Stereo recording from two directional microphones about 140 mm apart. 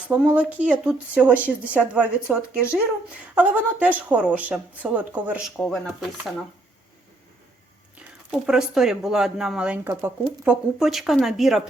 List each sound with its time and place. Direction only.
0.1 s speech: 10° right (ahead or behind)
5.6 s speech: 5° left (ahead or behind)
7.9 s speech: 5° right (ahead or behind)